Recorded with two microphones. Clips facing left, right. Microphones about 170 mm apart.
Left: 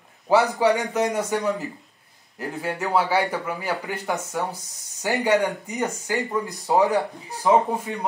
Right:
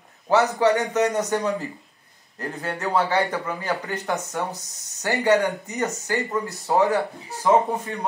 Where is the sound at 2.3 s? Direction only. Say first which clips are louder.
Left 1 dB; 10° left (ahead or behind).